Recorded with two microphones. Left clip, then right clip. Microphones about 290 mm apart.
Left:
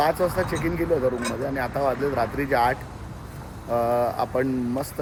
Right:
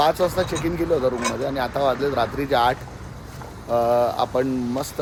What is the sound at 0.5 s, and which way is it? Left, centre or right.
Speech, right.